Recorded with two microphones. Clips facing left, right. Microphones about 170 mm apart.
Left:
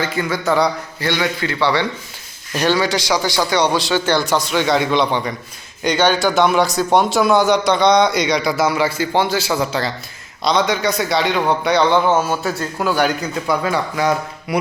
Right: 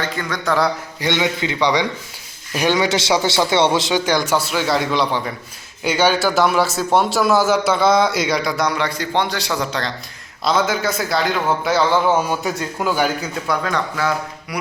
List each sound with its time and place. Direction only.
0.0 s a man's voice: 5° left (ahead or behind)
1.0 s a man's voice: 20° right (ahead or behind); by 14.1 s 15° left (ahead or behind)
14.5 s music: 25° left (ahead or behind)